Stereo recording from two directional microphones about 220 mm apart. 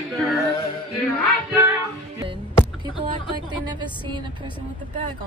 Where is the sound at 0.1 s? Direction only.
Centre (ahead or behind).